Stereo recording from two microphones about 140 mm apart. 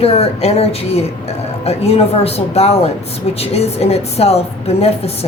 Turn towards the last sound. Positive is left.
turn(degrees=45)  # may be behind; listen again after turning